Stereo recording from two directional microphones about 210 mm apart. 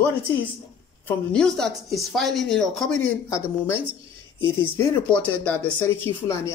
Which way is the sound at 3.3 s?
15° left (ahead or behind).